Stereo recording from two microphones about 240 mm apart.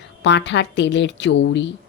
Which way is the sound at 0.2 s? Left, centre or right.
Left.